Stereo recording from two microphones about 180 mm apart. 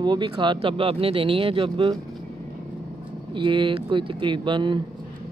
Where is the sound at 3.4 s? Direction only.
25° right (ahead or behind).